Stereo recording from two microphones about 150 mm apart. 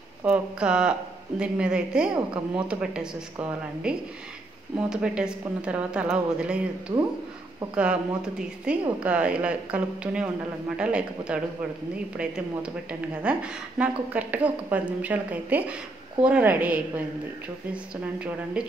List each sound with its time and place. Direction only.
0.2 s a woman's voice: 10° right (ahead or behind)
6.9 s speech: 25° right (ahead or behind)
7.7 s a woman's voice: 5° right (ahead or behind)